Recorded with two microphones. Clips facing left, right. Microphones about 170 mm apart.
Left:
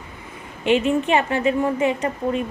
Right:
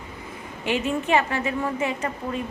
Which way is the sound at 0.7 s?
20° left (ahead or behind).